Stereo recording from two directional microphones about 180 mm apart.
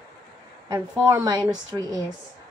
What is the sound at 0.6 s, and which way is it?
Speech, 15° right (ahead or behind).